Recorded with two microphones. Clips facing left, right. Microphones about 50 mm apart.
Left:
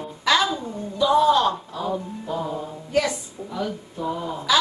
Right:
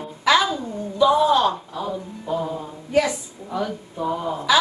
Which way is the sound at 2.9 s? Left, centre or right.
Centre.